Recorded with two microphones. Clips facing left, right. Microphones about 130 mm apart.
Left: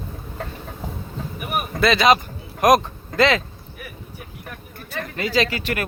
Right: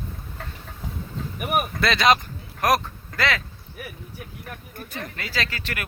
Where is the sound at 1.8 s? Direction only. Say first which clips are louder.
Left 5 dB; centre (ahead or behind).